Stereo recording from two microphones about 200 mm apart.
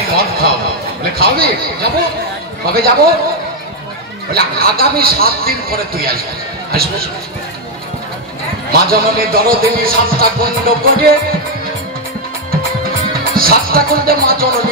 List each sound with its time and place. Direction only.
0.1 s a man's voice: 50° right (ahead or behind)
1.1 s music: 50° right (ahead or behind)
4.3 s music: 50° right (ahead or behind)
8.7 s music: 50° right (ahead or behind)
13.4 s music: 45° right (ahead or behind)